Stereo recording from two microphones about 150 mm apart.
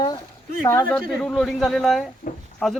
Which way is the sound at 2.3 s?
65° left (ahead or behind).